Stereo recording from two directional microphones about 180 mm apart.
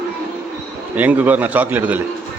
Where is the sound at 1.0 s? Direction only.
10° right (ahead or behind).